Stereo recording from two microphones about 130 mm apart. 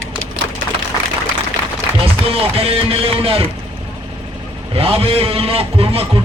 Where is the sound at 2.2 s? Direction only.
45° right (ahead or behind).